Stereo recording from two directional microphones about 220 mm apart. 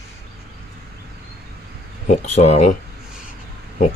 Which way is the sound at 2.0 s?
30° left (ahead or behind).